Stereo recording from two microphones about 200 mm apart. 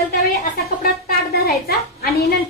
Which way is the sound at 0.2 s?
50° left (ahead or behind).